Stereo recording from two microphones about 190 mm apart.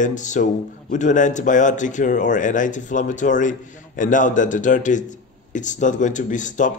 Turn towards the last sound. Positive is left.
turn(degrees=40)  # may be behind; listen again after turning